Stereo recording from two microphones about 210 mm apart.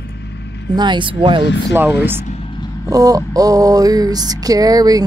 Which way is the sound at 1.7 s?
10° right (ahead or behind).